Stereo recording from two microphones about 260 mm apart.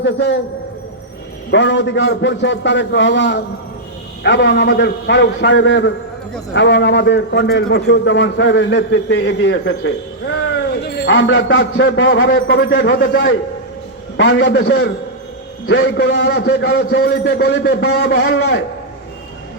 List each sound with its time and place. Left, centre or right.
0.0 s a man's voice: left
1.5 s a man's voice: left